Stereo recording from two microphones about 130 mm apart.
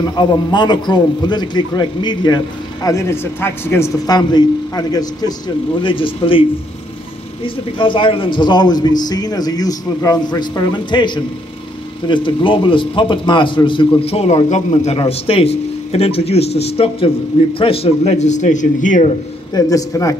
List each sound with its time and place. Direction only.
0.1 s a man's voice: 35° left (ahead or behind)
5.8 s a man's voice: 40° left (ahead or behind)
7.4 s a man's voice: 40° left (ahead or behind); by 19.1 s 75° left (ahead or behind)
19.5 s speech: 25° left (ahead or behind)